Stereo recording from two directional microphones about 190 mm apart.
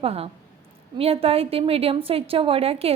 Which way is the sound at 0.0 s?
30° right (ahead or behind).